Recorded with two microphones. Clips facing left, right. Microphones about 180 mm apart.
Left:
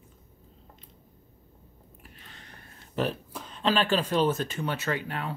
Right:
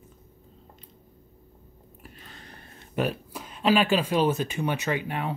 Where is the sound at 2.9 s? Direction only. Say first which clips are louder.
Right 2 dB; 10° right (ahead or behind).